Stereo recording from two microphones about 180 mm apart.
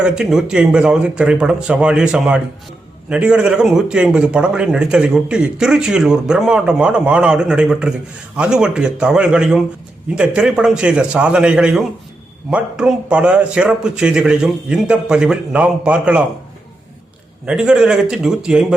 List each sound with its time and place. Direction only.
0.0 s a man's voice: 5° right (ahead or behind)
17.4 s a man's voice: 5° right (ahead or behind)